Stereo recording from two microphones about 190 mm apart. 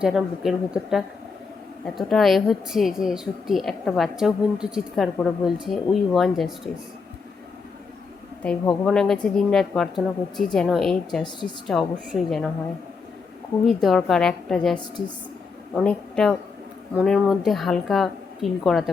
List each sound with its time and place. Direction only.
0.0 s a woman's voice: 5° right (ahead or behind)
8.8 s a woman's voice: 5° left (ahead or behind)
11.2 s a woman's voice: 25° left (ahead or behind)
11.7 s a woman's voice: centre (ahead or behind)
13.7 s a woman's voice: centre (ahead or behind)